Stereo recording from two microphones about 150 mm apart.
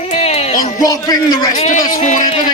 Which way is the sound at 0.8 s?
25° left (ahead or behind).